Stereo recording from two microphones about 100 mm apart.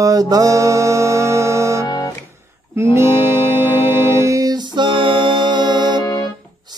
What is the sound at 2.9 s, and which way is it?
Music, 25° right (ahead or behind).